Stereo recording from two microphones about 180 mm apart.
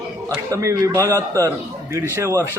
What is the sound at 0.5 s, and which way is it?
A man's voice, 15° right (ahead or behind).